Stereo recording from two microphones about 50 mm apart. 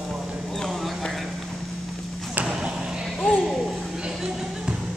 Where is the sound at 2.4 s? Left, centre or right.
Centre.